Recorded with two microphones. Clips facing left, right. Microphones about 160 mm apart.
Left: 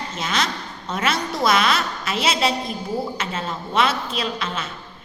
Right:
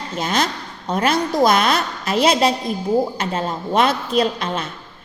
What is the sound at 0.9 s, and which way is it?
A woman's voice, 40° right (ahead or behind).